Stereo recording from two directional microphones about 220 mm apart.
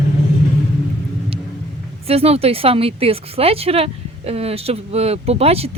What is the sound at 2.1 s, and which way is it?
A woman's voice, 25° right (ahead or behind).